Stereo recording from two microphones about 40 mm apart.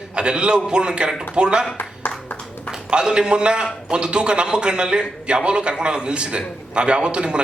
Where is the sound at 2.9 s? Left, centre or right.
Right.